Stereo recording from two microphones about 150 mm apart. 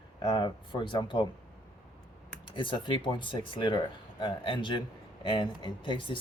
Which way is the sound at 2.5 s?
35° left (ahead or behind).